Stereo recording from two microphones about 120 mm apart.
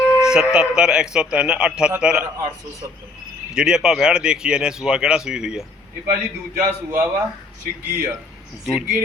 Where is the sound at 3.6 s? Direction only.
5° right (ahead or behind).